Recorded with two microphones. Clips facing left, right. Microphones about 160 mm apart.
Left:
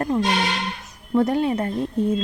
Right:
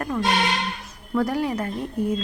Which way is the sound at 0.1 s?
25° left (ahead or behind).